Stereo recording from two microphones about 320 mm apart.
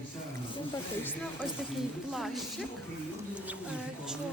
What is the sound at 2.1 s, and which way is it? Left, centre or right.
Speech, centre.